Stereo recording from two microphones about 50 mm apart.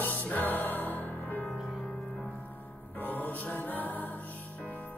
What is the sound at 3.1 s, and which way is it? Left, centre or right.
Music, left.